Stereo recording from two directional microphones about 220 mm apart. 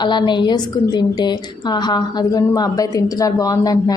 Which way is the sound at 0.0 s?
20° left (ahead or behind).